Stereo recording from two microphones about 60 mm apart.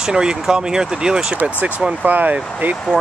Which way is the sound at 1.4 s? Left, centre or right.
Right.